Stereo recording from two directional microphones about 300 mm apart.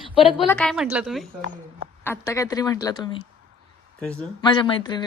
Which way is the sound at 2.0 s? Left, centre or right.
Centre.